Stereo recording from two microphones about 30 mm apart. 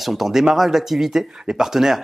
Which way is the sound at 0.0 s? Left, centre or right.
Centre.